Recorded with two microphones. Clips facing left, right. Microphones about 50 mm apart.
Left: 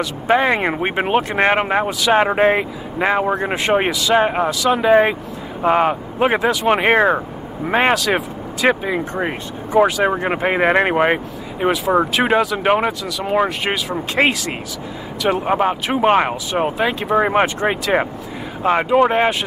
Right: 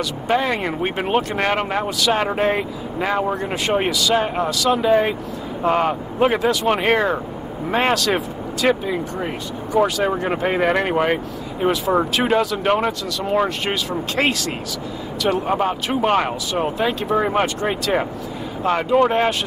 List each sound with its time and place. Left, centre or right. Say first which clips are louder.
0.0 s speech: left 4 dB; left